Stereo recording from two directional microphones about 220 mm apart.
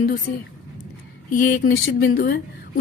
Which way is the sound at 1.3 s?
35° left (ahead or behind).